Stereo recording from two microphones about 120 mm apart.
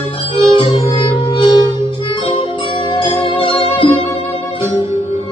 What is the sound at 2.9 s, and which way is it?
Music, 45° left (ahead or behind).